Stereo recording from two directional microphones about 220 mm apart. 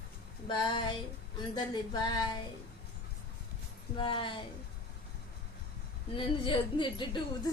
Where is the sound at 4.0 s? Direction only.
20° left (ahead or behind).